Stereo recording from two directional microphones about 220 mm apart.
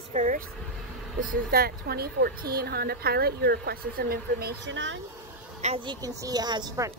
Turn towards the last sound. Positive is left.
turn(degrees=-15)  # may be behind; listen again after turning